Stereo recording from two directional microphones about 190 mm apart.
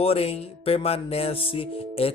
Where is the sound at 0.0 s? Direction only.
30° left (ahead or behind).